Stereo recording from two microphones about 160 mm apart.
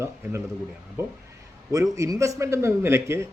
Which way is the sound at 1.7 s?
20° right (ahead or behind).